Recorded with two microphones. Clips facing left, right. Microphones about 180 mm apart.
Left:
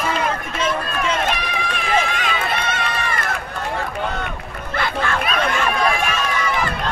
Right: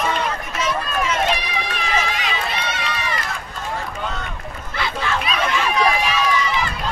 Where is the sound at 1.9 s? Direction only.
55° left (ahead or behind).